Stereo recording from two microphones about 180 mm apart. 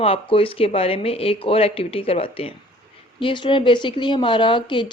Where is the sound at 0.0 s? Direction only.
30° left (ahead or behind).